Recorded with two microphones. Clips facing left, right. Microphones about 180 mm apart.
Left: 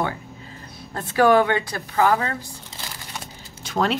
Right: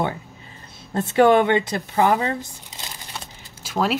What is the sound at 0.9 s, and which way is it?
A woman's voice, 25° right (ahead or behind).